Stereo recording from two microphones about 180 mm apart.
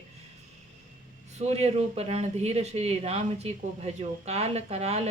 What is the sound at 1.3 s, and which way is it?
Speech, 35° right (ahead or behind).